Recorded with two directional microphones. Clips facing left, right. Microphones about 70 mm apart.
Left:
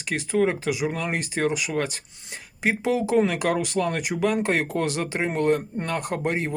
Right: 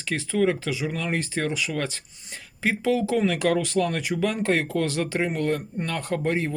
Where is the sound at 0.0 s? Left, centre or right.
Left.